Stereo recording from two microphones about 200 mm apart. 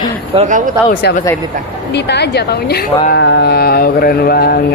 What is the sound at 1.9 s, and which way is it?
Speech, 60° left (ahead or behind).